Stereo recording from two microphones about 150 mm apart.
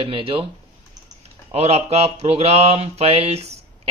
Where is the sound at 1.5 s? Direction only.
45° right (ahead or behind).